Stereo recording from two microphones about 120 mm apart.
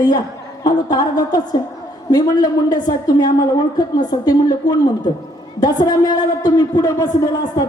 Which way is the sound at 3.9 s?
35° left (ahead or behind).